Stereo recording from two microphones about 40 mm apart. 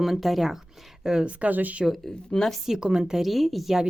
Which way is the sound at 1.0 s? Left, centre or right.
Centre.